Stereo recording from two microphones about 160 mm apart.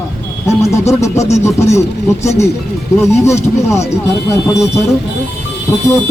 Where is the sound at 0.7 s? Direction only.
20° left (ahead or behind).